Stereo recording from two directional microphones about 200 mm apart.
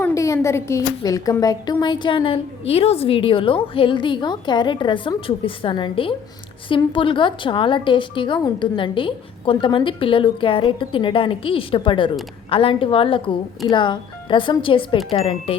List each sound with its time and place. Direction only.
0.0 s a woman's voice: 15° left (ahead or behind)